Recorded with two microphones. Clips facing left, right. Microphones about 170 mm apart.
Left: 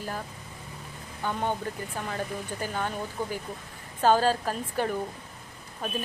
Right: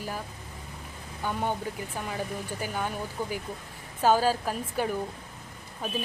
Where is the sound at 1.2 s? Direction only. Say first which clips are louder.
Even; 10° right (ahead or behind).